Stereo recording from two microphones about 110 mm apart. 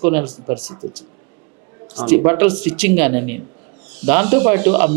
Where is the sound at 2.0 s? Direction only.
20° right (ahead or behind).